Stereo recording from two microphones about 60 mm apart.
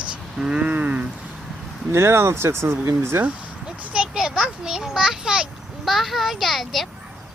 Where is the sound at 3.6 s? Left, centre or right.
Centre.